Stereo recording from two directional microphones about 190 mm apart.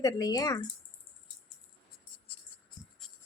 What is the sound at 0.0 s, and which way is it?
Speech, 20° left (ahead or behind).